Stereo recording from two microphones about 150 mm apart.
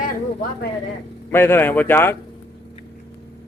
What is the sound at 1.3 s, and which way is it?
Speech, 15° left (ahead or behind).